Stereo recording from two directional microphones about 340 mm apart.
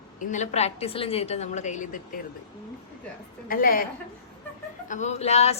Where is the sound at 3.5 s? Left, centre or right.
Left.